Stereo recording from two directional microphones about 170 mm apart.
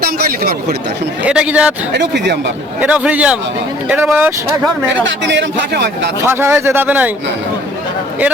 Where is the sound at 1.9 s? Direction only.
85° right.